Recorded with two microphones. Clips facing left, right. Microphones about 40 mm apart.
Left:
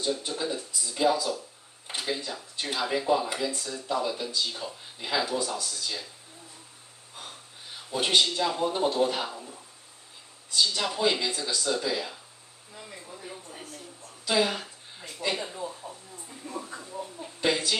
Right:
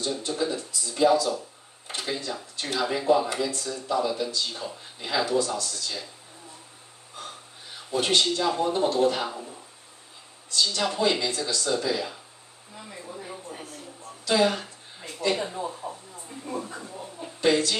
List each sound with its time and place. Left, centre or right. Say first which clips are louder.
0.3 s speech: right 4 dB; centre
7.9 s speech: right 1 dB; centre
10.5 s speech: right 1 dB; centre
14.2 s speech: right 3 dB; centre
15.8 s speech: right 5 dB; centre
16.9 s speech: even; centre